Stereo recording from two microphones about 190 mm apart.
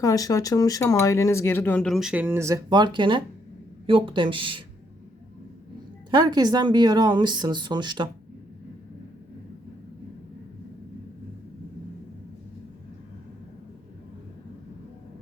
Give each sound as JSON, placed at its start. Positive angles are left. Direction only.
{"t": 0.0, "sound": "speech", "side_deg": 20}
{"t": 6.1, "sound": "speech", "side_deg": -25}